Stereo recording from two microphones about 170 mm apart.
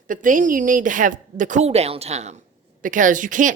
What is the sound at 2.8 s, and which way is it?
Speech, 50° right (ahead or behind).